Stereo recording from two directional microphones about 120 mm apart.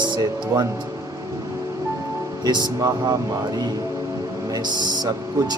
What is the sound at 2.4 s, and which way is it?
Speech, 35° right (ahead or behind).